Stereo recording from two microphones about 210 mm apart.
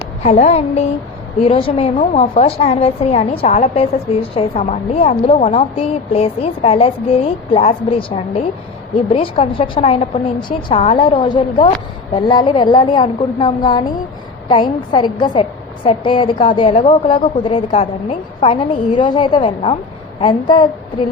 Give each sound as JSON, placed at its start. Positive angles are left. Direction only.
{"t": 0.3, "sound": "a woman's voice", "side_deg": 30}